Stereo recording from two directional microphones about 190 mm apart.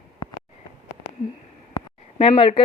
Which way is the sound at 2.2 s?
30° left (ahead or behind).